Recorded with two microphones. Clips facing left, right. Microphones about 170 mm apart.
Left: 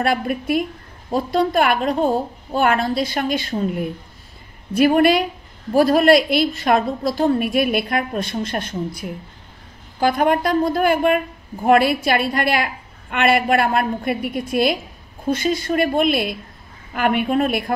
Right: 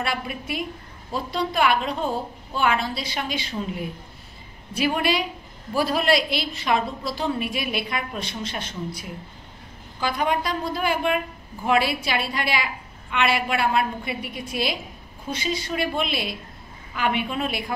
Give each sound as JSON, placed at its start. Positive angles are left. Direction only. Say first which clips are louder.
{"t": 0.0, "sound": "a woman's voice", "louder": "left 8 dB", "side_deg": 50}